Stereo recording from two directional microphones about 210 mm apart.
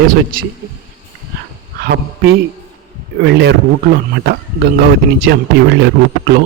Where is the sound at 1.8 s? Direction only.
50° right (ahead or behind).